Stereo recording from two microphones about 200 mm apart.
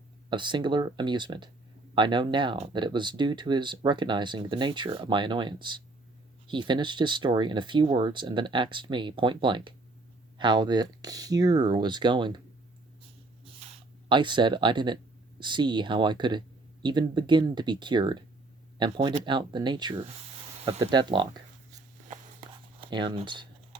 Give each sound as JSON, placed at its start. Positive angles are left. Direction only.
{"t": 0.3, "sound": "speech", "side_deg": -25}
{"t": 14.1, "sound": "speech", "side_deg": -25}
{"t": 22.8, "sound": "speech", "side_deg": -25}